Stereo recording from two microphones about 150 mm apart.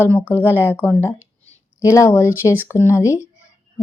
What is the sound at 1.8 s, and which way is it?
Speech, 20° left (ahead or behind).